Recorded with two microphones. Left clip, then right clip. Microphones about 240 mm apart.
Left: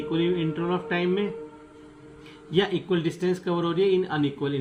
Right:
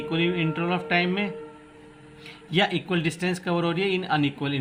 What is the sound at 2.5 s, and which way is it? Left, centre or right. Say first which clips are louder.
Speech: even; right.